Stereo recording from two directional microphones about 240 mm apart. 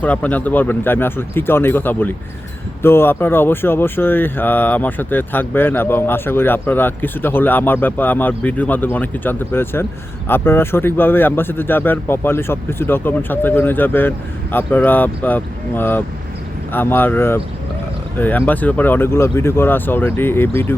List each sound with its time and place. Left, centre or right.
0.0 s speech: centre